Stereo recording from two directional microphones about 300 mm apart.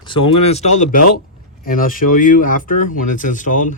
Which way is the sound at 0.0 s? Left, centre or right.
Centre.